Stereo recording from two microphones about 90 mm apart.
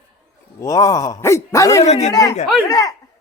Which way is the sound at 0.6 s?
35° left (ahead or behind).